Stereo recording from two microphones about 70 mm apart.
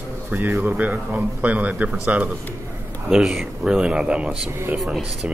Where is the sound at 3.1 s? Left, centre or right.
Centre.